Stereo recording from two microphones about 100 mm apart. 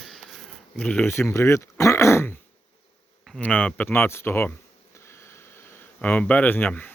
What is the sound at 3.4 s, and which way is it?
Speech, 15° left (ahead or behind).